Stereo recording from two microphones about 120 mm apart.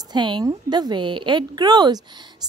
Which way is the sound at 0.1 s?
40° right (ahead or behind).